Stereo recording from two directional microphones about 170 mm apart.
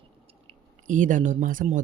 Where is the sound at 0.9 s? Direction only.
50° right (ahead or behind).